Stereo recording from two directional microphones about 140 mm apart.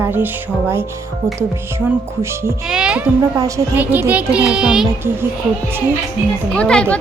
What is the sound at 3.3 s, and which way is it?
Speech, 25° right (ahead or behind).